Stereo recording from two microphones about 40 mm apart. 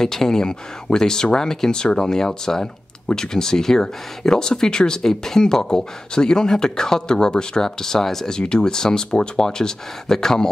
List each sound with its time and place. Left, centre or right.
0.0 s speech: centre
8.4 s speech: centre